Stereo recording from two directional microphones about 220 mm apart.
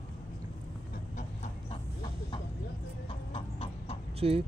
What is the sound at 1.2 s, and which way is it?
Chicken, 30° left (ahead or behind).